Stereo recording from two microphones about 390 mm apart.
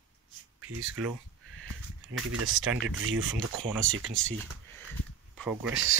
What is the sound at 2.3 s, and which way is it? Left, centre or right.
Speech, right.